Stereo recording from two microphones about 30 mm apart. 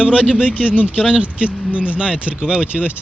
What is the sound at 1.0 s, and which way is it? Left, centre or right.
Speech, right.